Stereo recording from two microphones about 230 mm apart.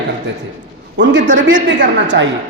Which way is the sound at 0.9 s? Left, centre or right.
Right.